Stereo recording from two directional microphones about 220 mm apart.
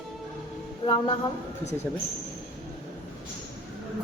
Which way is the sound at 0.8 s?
25° left (ahead or behind).